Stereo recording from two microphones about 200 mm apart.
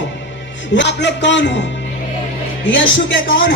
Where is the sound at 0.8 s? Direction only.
60° left (ahead or behind).